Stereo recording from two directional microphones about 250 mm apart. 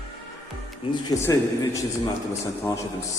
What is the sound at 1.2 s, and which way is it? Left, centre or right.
Speech, centre.